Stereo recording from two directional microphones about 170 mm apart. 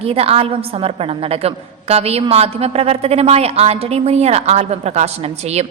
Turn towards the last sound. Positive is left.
turn(degrees=-40)  # may be behind; listen again after turning